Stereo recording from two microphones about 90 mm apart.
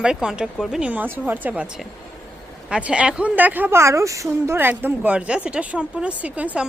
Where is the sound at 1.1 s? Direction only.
20° right (ahead or behind).